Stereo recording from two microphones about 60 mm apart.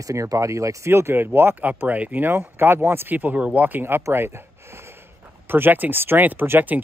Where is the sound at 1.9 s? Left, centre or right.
Right.